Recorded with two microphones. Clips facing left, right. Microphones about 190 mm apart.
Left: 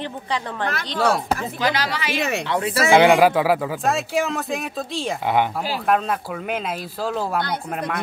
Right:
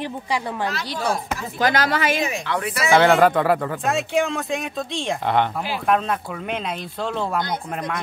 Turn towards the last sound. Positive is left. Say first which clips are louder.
# left 1 dB
turn(degrees=5)  # may be behind; listen again after turning